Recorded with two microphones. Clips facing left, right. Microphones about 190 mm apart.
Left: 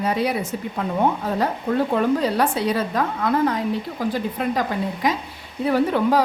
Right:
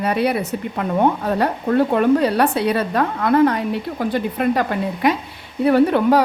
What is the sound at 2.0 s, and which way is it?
A woman's voice, 65° right (ahead or behind).